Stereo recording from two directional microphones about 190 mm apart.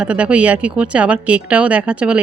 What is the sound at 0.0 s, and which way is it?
Speech, 5° right (ahead or behind).